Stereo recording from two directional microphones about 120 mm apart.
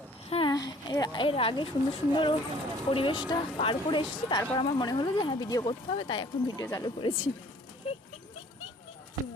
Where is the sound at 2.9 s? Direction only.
45° left (ahead or behind).